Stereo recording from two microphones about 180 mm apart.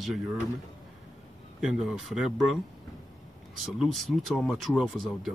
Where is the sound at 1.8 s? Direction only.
Centre (ahead or behind).